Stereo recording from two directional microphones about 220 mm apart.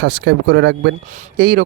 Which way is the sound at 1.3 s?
45° right (ahead or behind).